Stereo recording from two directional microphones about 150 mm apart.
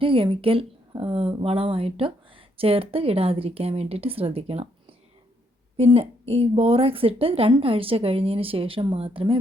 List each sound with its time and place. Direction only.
0.0 s speech: 35° right (ahead or behind)